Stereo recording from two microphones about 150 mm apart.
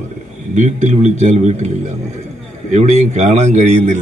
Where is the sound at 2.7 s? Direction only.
50° right (ahead or behind).